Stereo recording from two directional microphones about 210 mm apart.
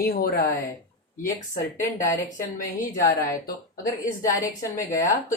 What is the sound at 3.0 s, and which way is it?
Speech, 45° left (ahead or behind).